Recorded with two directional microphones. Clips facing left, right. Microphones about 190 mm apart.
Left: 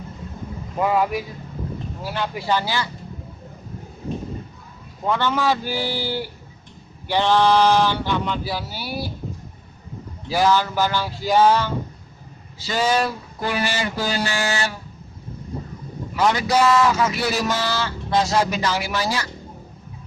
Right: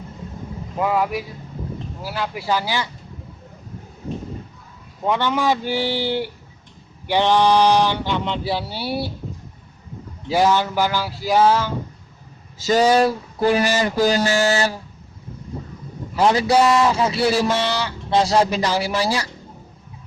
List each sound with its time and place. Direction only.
0.8 s speech: centre (ahead or behind)
5.0 s speech: 15° right (ahead or behind)
10.2 s speech: 20° right (ahead or behind); by 11.7 s 5° right (ahead or behind)
12.5 s speech: 40° right (ahead or behind)
16.1 s speech: 30° right (ahead or behind)
18.1 s speech: 30° right (ahead or behind)